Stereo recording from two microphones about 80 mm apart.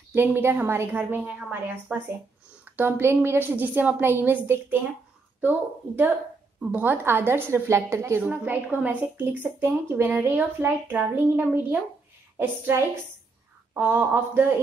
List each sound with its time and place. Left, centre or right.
0.1 s a woman's voice: right
8.2 s a woman's voice: centre
12.4 s a woman's voice: right